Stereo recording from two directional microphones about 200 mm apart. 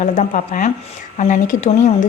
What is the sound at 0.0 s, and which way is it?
A woman's voice, 40° left (ahead or behind).